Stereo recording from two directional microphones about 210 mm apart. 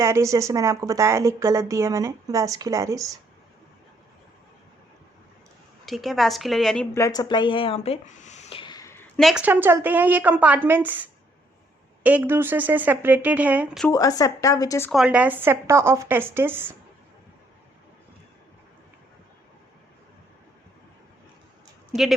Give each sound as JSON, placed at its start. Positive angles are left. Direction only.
{"t": 0.0, "sound": "speech", "side_deg": -15}
{"t": 5.8, "sound": "a woman's voice", "side_deg": 0}
{"t": 12.0, "sound": "speech", "side_deg": -10}
{"t": 13.8, "sound": "speech", "side_deg": 15}
{"t": 14.8, "sound": "speech", "side_deg": 0}